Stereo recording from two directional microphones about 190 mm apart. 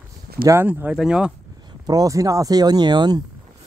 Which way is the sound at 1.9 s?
20° right (ahead or behind).